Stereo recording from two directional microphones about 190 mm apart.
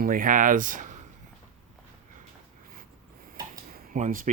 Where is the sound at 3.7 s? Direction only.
45° right (ahead or behind).